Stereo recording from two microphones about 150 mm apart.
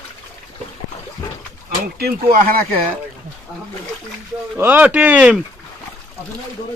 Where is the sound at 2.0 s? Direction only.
85° right.